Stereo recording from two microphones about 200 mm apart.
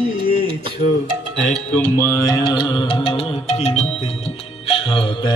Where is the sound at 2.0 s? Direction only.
15° left (ahead or behind).